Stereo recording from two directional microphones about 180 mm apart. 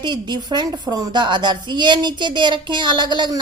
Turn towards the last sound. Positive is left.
turn(degrees=-25)  # may be behind; listen again after turning